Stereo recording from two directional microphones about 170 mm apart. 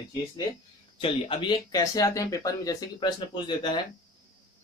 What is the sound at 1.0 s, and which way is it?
Speech, 30° left (ahead or behind).